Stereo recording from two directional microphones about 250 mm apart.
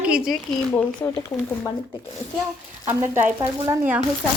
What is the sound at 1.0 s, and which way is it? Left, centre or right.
Speech, centre.